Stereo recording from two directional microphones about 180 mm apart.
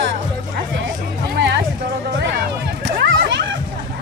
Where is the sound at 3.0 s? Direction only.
75° right (ahead or behind).